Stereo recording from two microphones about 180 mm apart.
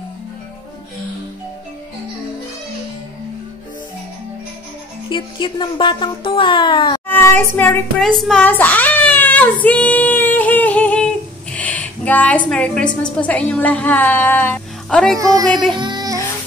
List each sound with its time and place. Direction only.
5.1 s speech: 25° left (ahead or behind)
7.1 s child singing: 10° left (ahead or behind)
11.5 s a woman's voice: 10° left (ahead or behind)
15.1 s speech: 20° right (ahead or behind)
15.4 s music: centre (ahead or behind)
15.8 s child singing: 25° right (ahead or behind)